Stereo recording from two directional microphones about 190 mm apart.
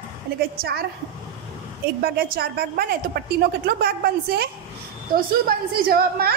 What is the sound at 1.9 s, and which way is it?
A woman's voice, 50° right (ahead or behind).